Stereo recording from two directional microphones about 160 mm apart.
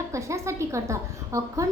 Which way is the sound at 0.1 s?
20° right (ahead or behind).